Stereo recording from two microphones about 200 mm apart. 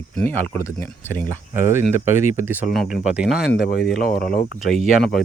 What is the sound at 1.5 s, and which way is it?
Speech, 10° right (ahead or behind).